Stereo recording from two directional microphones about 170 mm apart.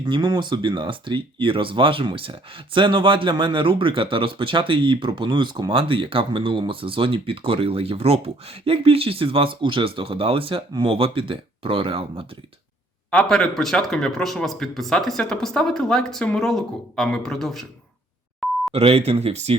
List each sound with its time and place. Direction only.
0.0 s speech: 25° right (ahead or behind)
13.1 s speech: 5° left (ahead or behind)
18.7 s speech: 35° right (ahead or behind)